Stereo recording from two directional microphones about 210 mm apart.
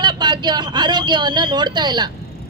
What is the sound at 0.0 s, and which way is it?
Speech, 20° right (ahead or behind).